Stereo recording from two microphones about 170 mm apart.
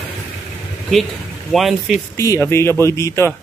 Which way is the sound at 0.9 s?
Centre (ahead or behind).